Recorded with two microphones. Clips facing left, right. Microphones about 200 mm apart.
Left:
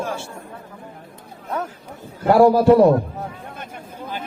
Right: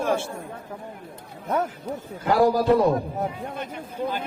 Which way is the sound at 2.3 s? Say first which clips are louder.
Left 6 dB; 65° left (ahead or behind).